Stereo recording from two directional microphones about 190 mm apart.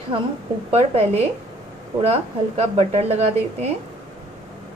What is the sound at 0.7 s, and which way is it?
A woman's voice, 35° right (ahead or behind).